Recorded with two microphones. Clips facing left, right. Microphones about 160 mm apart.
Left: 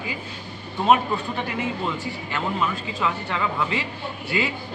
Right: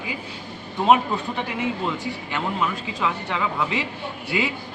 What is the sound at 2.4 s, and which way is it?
Speech, 15° right (ahead or behind).